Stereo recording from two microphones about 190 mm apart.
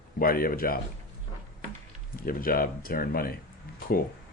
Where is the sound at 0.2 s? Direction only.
50° left (ahead or behind).